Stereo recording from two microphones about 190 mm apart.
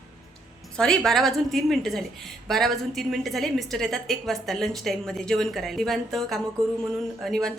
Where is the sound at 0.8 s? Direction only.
5° left (ahead or behind).